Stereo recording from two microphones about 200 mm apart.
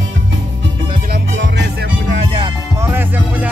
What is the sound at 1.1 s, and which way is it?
Music, 60° right (ahead or behind).